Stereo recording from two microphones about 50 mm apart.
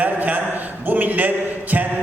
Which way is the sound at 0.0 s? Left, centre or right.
Right.